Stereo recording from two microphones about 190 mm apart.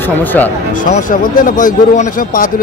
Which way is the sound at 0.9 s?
45° left (ahead or behind).